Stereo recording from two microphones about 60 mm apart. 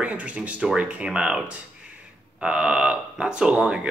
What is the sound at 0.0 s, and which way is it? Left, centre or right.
Speech, right.